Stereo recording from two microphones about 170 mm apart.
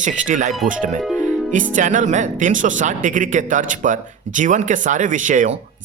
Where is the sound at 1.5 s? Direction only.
50° right (ahead or behind).